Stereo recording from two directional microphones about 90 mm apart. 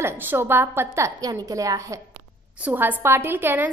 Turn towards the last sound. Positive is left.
turn(degrees=-20)  # may be behind; listen again after turning